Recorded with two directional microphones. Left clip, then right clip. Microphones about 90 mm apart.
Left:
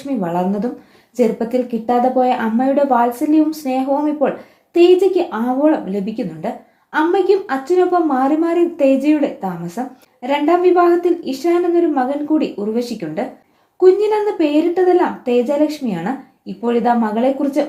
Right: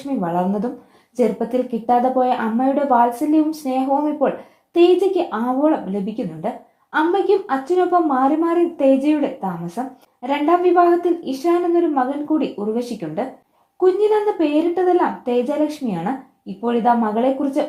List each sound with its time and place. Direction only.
0.3 s a woman's voice: 25° right (ahead or behind)